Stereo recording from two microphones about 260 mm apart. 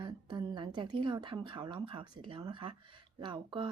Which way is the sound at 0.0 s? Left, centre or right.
Centre.